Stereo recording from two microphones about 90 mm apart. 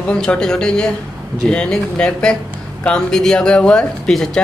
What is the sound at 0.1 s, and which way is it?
Speech, 10° left (ahead or behind).